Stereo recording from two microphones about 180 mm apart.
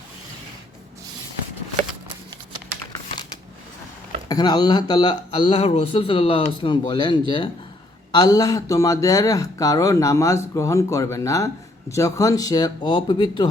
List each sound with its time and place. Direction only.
4.3 s speech: 20° left (ahead or behind)